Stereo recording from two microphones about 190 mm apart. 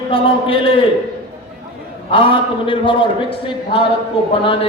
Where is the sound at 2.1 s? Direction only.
25° left (ahead or behind).